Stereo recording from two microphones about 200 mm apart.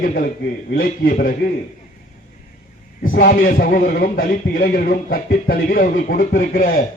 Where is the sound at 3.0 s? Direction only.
45° left (ahead or behind).